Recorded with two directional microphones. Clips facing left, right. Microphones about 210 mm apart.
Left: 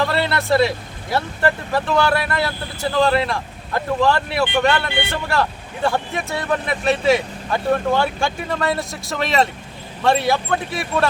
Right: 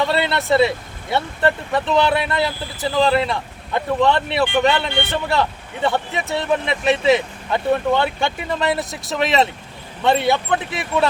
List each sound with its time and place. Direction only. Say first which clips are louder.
0.0 s speech: right 1 dB; centre (ahead or behind)
2.0 s speech: right 1 dB; 20° right (ahead or behind)
2.3 s speech: right 1 dB; centre (ahead or behind)